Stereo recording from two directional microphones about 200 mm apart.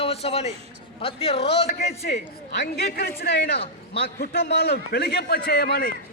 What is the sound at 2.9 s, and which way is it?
A man's voice, 50° left (ahead or behind).